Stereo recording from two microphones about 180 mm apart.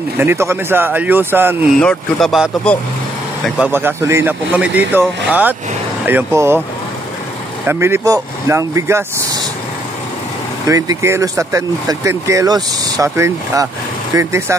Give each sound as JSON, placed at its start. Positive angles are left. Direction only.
{"t": 0.2, "sound": "speech", "side_deg": -15}
{"t": 1.8, "sound": "speech", "side_deg": 5}
{"t": 7.6, "sound": "speech", "side_deg": -15}
{"t": 10.7, "sound": "speech", "side_deg": -15}